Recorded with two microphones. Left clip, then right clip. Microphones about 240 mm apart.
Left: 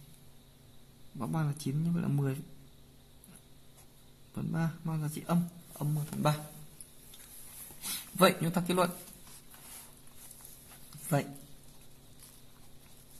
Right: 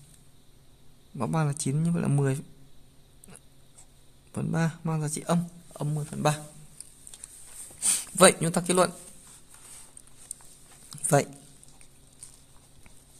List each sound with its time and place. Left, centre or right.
1.1 s speech: right
4.3 s speech: right
7.8 s a man's voice: right